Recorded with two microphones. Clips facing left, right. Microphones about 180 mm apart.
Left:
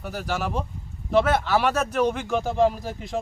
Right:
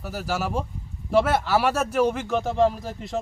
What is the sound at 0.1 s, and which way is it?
Speech, 5° right (ahead or behind).